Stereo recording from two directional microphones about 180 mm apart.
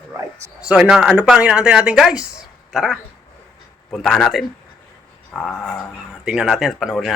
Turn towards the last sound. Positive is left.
turn(degrees=0)  # may be behind; listen again after turning